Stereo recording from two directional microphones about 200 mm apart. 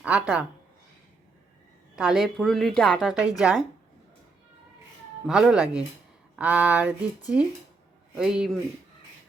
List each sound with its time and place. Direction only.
0.0 s speech: 5° right (ahead or behind)
2.0 s speech: centre (ahead or behind)
5.2 s speech: 5° right (ahead or behind)